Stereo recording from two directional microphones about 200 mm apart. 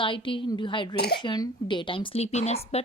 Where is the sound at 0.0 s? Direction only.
25° left (ahead or behind).